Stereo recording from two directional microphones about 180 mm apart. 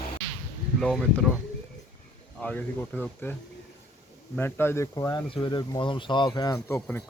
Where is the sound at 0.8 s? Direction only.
5° left (ahead or behind).